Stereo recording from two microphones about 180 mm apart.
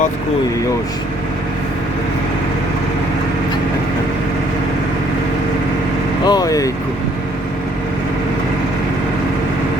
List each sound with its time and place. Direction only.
6.2 s speech: 20° left (ahead or behind)